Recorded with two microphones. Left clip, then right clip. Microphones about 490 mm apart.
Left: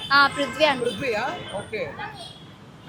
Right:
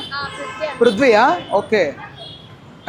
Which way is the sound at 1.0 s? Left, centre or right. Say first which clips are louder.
Right 16 dB; right.